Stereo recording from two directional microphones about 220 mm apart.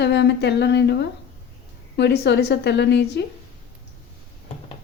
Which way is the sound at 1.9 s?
50° left (ahead or behind).